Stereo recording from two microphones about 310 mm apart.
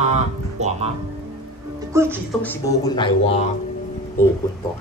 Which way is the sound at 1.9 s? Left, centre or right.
Centre.